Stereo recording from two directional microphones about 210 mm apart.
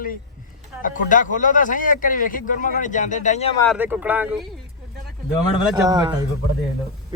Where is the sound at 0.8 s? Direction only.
40° left (ahead or behind).